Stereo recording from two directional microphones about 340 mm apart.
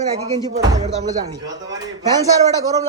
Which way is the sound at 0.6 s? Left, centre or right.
Centre.